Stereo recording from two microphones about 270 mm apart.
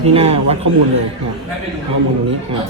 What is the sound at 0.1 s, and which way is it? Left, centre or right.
Speech, right.